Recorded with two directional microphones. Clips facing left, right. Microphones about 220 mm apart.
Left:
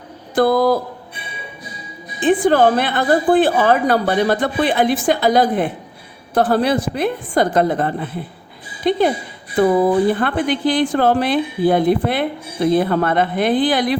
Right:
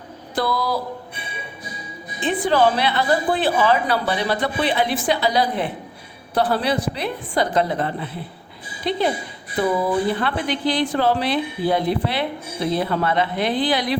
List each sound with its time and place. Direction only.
0.3 s a woman's voice: 50° left (ahead or behind)
2.2 s a woman's voice: 50° left (ahead or behind)
10.1 s a woman's voice: 50° left (ahead or behind)